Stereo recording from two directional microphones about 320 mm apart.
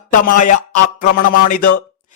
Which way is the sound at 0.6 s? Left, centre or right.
Left.